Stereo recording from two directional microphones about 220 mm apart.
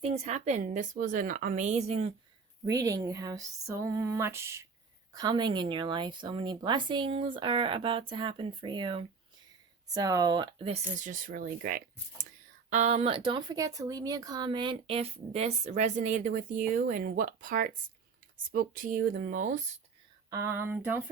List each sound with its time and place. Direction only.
0.0 s a woman's voice: 30° right (ahead or behind)
2.6 s a woman's voice: 15° right (ahead or behind); by 19.6 s 35° right (ahead or behind)
20.3 s speech: 10° right (ahead or behind)